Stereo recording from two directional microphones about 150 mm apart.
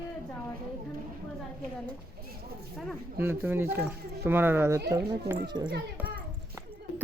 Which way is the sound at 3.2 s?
15° right (ahead or behind).